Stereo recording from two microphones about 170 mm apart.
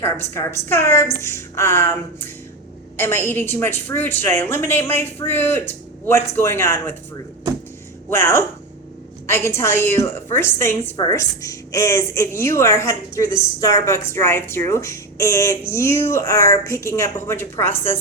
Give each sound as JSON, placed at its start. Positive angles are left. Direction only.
{"t": 0.0, "sound": "a woman's voice", "side_deg": 15}
{"t": 8.1, "sound": "a woman's voice", "side_deg": 15}